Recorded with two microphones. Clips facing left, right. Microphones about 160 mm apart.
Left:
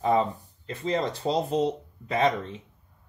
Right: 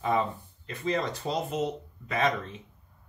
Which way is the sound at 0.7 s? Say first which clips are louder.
Left 2 dB; 30° left (ahead or behind).